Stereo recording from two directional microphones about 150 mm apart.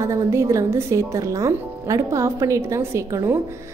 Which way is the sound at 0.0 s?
20° right (ahead or behind).